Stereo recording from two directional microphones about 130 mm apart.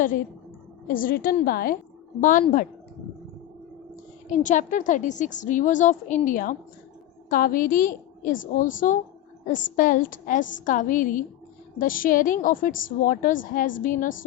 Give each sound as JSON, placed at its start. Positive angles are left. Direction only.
{"t": 0.9, "sound": "a woman's voice", "side_deg": 90}
{"t": 4.3, "sound": "a woman's voice", "side_deg": 75}